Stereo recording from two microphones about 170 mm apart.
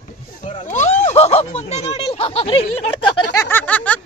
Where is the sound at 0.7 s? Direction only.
45° left (ahead or behind).